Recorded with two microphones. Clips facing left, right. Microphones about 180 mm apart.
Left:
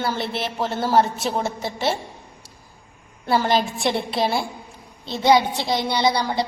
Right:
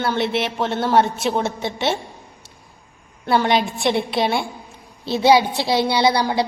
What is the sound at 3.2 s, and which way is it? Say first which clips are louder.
A woman's voice: right 2 dB; 5° left (ahead or behind).